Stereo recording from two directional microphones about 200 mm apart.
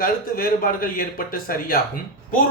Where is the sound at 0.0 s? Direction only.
45° left (ahead or behind).